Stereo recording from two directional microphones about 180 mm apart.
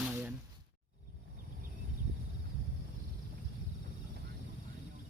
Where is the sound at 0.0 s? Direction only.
10° right (ahead or behind).